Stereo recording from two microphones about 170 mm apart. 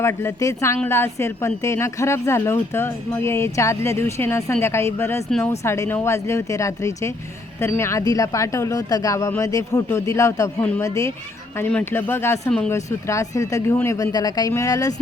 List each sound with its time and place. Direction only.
0.0 s speech: 15° left (ahead or behind)